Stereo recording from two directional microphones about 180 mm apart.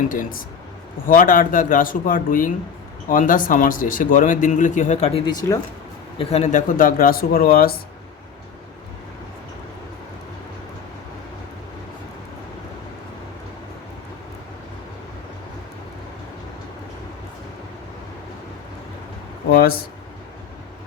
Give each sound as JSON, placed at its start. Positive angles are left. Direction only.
{"t": 0.1, "sound": "speech", "side_deg": 50}
{"t": 5.2, "sound": "speech", "side_deg": 20}
{"t": 6.1, "sound": "speech", "side_deg": 35}
{"t": 19.5, "sound": "a sound", "side_deg": 55}